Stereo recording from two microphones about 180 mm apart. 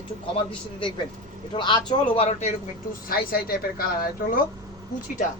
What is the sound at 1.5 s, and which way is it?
Speech, 25° left (ahead or behind).